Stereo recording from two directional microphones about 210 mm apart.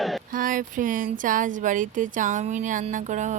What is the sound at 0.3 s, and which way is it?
Speech, 40° right (ahead or behind).